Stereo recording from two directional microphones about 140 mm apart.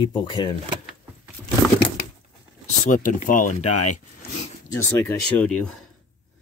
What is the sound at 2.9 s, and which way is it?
Speech, 70° left (ahead or behind).